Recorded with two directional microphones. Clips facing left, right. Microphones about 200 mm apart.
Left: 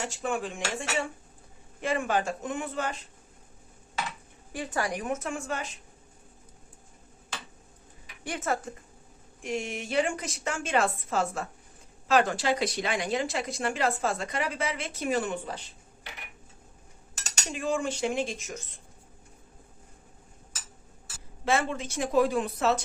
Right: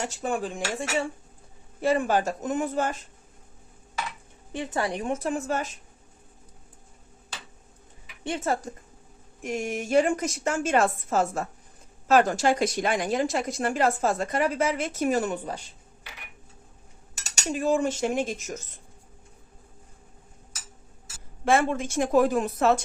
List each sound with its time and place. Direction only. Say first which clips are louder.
0.0 s speech: right 2 dB; 40° right (ahead or behind)
4.5 s a woman's voice: right 3 dB; 25° right (ahead or behind)
5.5 s a woman's voice: right 5 dB; 45° right (ahead or behind)
8.2 s a woman's voice: right 3 dB; 25° right (ahead or behind)
9.4 s a woman's voice: right 3 dB; 45° right (ahead or behind)
17.5 s a woman's voice: right 5 dB; 40° right (ahead or behind)
21.4 s a woman's voice: right 5 dB; 55° right (ahead or behind)